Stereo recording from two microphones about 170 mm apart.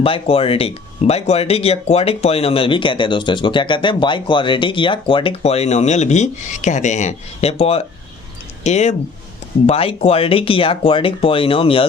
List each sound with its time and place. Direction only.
0.0 s speech: 35° left (ahead or behind)